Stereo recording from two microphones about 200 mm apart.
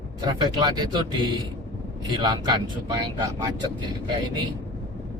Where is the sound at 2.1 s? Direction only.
20° right (ahead or behind).